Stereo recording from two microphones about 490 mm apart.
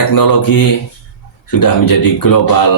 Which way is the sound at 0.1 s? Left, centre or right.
Left.